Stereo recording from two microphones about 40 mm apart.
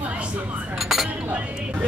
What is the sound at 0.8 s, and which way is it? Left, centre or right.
Cutlery, centre.